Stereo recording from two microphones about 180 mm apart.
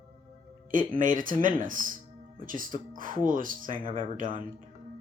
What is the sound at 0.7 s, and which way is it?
Speech, 50° right (ahead or behind).